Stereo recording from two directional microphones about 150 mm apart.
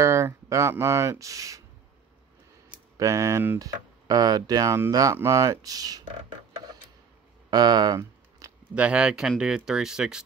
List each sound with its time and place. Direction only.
0.0 s speech: 20° right (ahead or behind)
3.0 s speech: 20° right (ahead or behind)
7.5 s a sound: 25° right (ahead or behind)
8.7 s speech: 10° right (ahead or behind)